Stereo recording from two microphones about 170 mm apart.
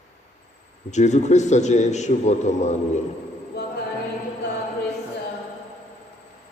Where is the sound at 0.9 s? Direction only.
45° left (ahead or behind).